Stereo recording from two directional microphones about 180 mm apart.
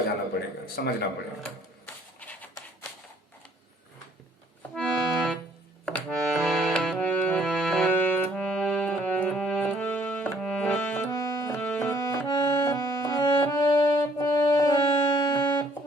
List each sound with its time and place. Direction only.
0.8 s a man's voice: 60° left (ahead or behind)
4.7 s accordion: 5° left (ahead or behind)
11.0 s music: 20° left (ahead or behind)
11.5 s accordion: 10° left (ahead or behind)
13.4 s music: 20° left (ahead or behind)